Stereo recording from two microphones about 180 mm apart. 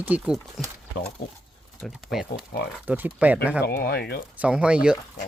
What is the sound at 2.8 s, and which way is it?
Speech, 10° right (ahead or behind).